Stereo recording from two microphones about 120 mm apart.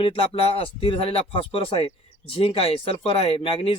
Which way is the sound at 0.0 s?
50° left (ahead or behind).